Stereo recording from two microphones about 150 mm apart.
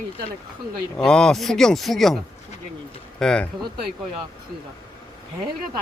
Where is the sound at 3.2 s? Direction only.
5° left (ahead or behind).